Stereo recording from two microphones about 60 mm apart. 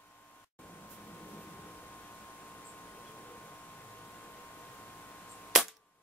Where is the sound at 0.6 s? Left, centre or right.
Left.